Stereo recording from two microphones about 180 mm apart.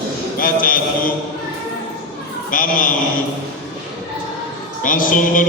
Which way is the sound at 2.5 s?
50° left (ahead or behind).